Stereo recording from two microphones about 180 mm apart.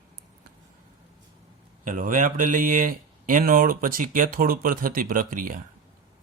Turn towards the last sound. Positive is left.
turn(degrees=-50)  # may be behind; listen again after turning